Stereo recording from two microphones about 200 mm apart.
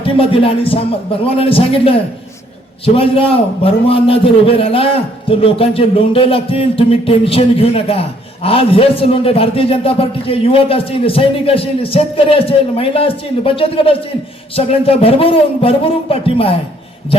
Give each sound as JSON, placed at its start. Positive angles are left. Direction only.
{"t": 0.0, "sound": "a man's voice", "side_deg": 25}